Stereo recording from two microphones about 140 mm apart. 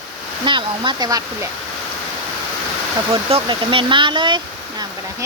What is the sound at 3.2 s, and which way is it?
Speech, 40° right (ahead or behind).